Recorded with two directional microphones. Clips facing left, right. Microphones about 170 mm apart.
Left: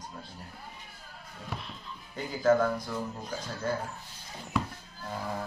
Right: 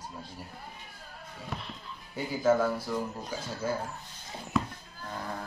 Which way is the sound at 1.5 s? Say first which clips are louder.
Even; centre (ahead or behind).